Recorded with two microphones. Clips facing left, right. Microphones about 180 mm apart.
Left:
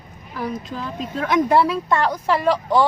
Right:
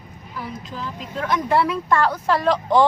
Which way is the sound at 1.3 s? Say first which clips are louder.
Left 3 dB; 40° left (ahead or behind).